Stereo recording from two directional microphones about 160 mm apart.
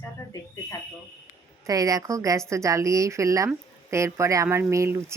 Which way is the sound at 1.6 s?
20° right (ahead or behind).